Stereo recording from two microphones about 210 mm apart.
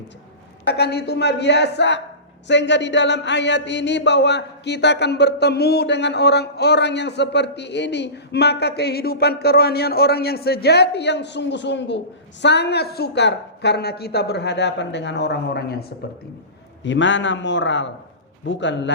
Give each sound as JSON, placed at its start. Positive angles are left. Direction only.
{"t": 0.6, "sound": "speech", "side_deg": 50}
{"t": 16.8, "sound": "a man's voice", "side_deg": 60}